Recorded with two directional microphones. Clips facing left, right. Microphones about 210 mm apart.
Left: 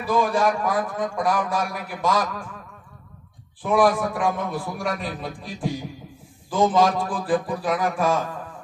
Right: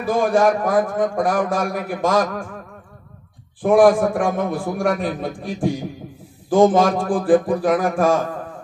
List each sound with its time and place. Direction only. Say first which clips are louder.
0.0 s a man's voice: right 4 dB; 50° right (ahead or behind)
3.6 s a man's voice: right 7 dB; 50° right (ahead or behind)